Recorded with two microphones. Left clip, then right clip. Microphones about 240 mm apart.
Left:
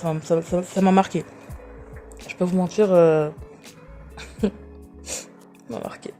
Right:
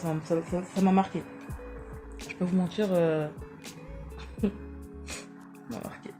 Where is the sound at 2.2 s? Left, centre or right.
Left.